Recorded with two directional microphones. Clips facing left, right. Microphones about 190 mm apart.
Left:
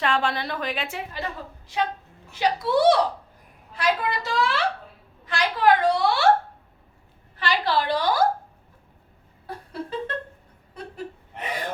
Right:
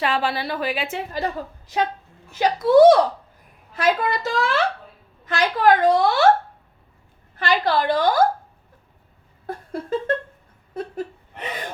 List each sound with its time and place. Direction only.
0.0 s speech: 5° right (ahead or behind)
1.1 s a woman's voice: 40° right (ahead or behind)
7.3 s a woman's voice: 45° right (ahead or behind)
9.5 s a sound: 45° right (ahead or behind)
11.3 s gasp: 25° right (ahead or behind)